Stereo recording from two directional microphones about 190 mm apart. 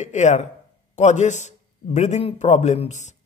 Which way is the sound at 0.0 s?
40° left (ahead or behind).